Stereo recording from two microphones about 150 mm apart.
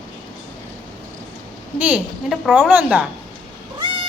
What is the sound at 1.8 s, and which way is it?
A woman's voice, 5° right (ahead or behind).